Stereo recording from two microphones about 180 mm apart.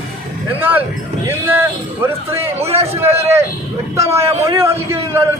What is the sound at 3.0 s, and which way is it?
A man's voice, 15° right (ahead or behind).